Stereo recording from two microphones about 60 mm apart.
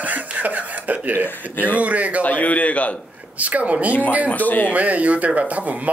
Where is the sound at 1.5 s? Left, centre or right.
Left.